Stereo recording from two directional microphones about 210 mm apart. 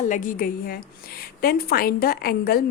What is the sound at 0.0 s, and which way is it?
A woman's voice, 35° left (ahead or behind).